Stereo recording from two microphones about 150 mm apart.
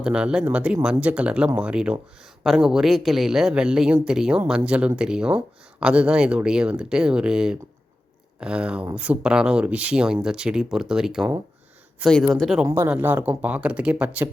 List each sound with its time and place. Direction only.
0.0 s speech: 5° right (ahead or behind)
12.3 s speech: centre (ahead or behind)
12.6 s speech: 20° right (ahead or behind)